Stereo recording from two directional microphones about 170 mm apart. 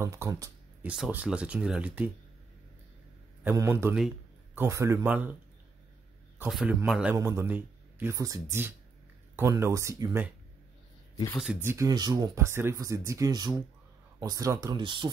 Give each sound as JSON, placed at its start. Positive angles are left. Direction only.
{"t": 0.0, "sound": "speech", "side_deg": -15}
{"t": 0.8, "sound": "speech", "side_deg": -5}
{"t": 3.4, "sound": "speech", "side_deg": -15}
{"t": 6.5, "sound": "speech", "side_deg": -10}
{"t": 11.6, "sound": "speech", "side_deg": -15}